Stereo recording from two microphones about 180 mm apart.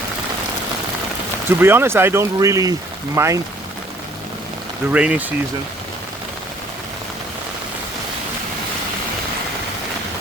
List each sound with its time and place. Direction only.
1.5 s speech: 15° right (ahead or behind)
4.9 s speech: 5° right (ahead or behind)